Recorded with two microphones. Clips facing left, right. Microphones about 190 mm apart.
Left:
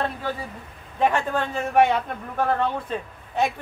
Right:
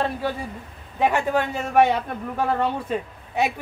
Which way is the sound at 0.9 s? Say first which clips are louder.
Right 1 dB; 10° right (ahead or behind).